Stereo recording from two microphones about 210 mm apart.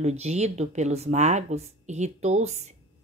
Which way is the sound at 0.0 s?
30° right (ahead or behind).